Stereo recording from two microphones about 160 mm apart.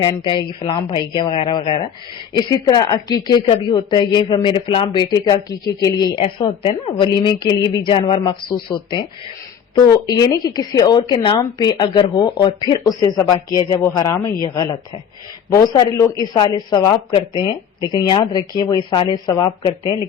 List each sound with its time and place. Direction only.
0.0 s a woman's voice: 25° left (ahead or behind)